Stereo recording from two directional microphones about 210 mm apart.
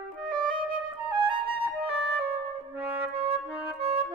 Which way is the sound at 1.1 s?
25° right (ahead or behind).